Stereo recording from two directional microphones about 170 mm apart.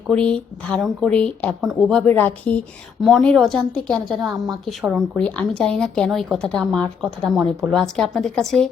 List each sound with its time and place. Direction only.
0.1 s speech: 5° left (ahead or behind)